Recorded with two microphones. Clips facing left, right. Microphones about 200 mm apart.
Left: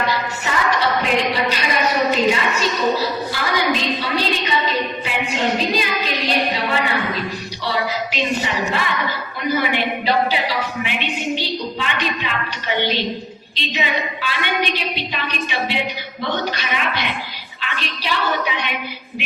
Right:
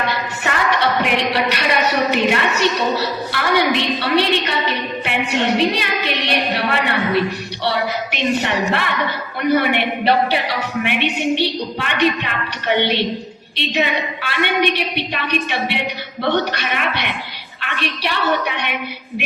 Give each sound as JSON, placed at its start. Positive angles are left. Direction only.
{"t": 0.4, "sound": "music", "side_deg": -60}
{"t": 1.0, "sound": "a woman's voice", "side_deg": -70}